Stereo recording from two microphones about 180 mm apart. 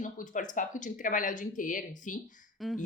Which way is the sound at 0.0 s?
45° left (ahead or behind).